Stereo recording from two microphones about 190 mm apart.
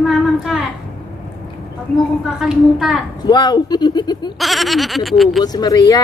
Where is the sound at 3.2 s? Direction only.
20° left (ahead or behind).